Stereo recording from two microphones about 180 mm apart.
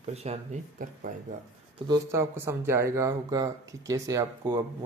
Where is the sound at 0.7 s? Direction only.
45° right (ahead or behind).